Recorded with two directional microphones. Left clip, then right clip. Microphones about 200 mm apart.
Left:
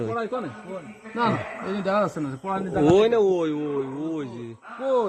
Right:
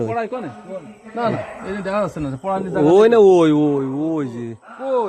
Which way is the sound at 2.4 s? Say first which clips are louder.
Right 5 dB; 50° right (ahead or behind).